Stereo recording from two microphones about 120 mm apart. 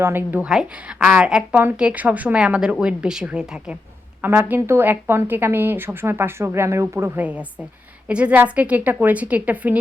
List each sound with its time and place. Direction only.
0.0 s a woman's voice: 20° right (ahead or behind)
7.2 s a woman's voice: 10° right (ahead or behind)